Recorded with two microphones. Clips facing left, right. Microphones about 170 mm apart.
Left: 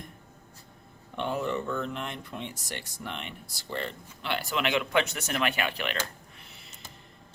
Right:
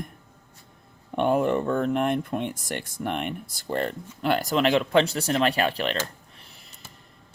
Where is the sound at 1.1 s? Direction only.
55° right (ahead or behind).